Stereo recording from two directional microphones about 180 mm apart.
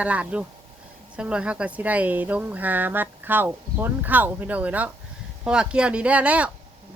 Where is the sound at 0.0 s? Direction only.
5° right (ahead or behind).